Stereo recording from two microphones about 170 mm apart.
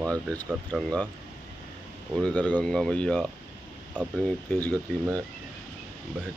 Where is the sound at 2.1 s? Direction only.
5° left (ahead or behind).